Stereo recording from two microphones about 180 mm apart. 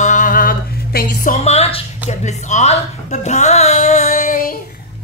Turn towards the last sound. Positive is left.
turn(degrees=50)  # may be behind; listen again after turning